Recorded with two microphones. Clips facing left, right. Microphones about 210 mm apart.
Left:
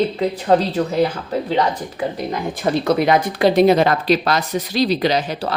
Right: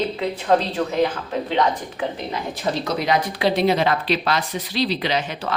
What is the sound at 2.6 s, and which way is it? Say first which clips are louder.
Speech: left 7 dB; 55° left (ahead or behind).